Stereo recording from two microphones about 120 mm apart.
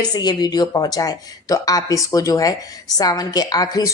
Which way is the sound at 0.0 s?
35° left (ahead or behind).